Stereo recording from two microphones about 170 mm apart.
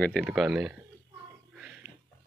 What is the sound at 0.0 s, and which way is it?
Speech, 5° left (ahead or behind).